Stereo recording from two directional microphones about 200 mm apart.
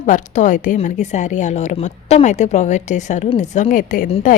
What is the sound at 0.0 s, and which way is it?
A woman's voice, 40° left (ahead or behind).